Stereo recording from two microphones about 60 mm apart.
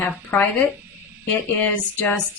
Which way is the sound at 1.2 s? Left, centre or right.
Left.